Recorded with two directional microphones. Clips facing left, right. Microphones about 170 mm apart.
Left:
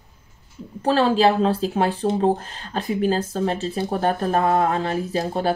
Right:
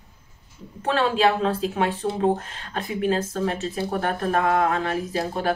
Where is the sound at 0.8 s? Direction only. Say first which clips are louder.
Left 3 dB; 35° left (ahead or behind).